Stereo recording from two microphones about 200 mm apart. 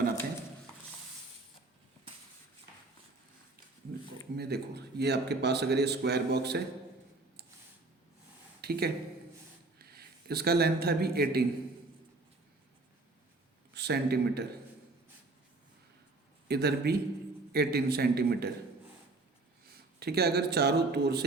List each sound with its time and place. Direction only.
4.4 s a man's voice: 55° right (ahead or behind)
8.6 s a man's voice: 50° right (ahead or behind)
13.7 s a man's voice: 55° right (ahead or behind)
16.5 s speech: 55° right (ahead or behind)
20.0 s speech: 55° right (ahead or behind)